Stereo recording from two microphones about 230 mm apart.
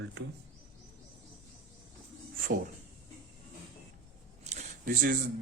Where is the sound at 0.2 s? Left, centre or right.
Right.